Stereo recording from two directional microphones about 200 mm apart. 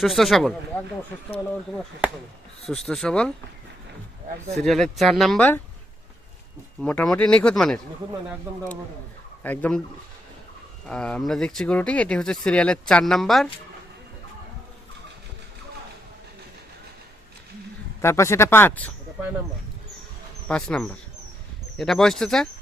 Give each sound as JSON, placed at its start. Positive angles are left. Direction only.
{"t": 0.0, "sound": "speech", "side_deg": 0}
{"t": 2.6, "sound": "speech", "side_deg": 0}
{"t": 4.5, "sound": "speech", "side_deg": 0}
{"t": 6.8, "sound": "speech", "side_deg": 5}
{"t": 9.4, "sound": "speech", "side_deg": 10}
{"t": 10.8, "sound": "speech", "side_deg": 5}
{"t": 18.0, "sound": "speech", "side_deg": 15}
{"t": 20.5, "sound": "speech", "side_deg": 5}